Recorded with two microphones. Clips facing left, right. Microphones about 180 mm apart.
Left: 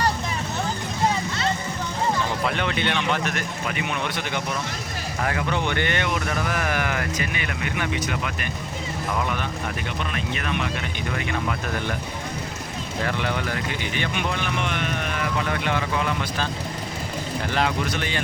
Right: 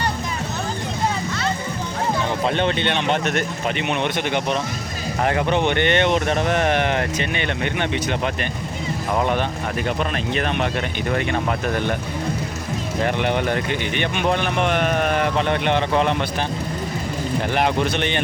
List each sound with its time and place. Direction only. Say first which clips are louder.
2.4 s speech: right 4 dB; 25° right (ahead or behind)
5.2 s speech: right 6 dB; 25° right (ahead or behind)
13.1 s speech: right 6 dB; 20° right (ahead or behind)
14.3 s speech: right 7 dB; 50° right (ahead or behind)
15.4 s speech: right 6 dB; 25° right (ahead or behind)
17.5 s speech: right 3 dB; 20° right (ahead or behind)